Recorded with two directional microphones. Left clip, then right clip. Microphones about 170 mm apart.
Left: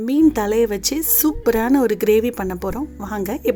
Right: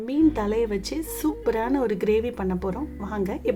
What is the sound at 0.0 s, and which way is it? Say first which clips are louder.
A woman's voice: left 6 dB; 40° left (ahead or behind).